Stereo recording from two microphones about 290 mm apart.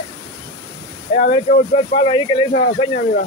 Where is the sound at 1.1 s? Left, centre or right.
Left.